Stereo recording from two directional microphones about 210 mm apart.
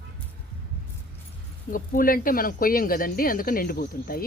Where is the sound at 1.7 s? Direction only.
40° left (ahead or behind).